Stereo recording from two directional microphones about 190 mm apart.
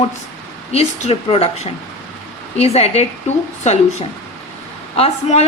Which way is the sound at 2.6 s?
35° left (ahead or behind).